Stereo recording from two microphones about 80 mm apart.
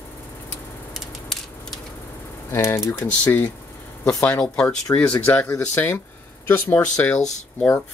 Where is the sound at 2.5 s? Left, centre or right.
Left.